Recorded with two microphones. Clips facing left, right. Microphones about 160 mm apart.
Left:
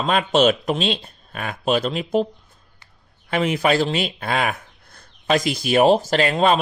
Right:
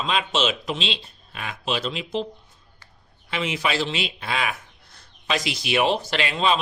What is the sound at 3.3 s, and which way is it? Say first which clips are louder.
Speech: left 7 dB; 50° left (ahead or behind).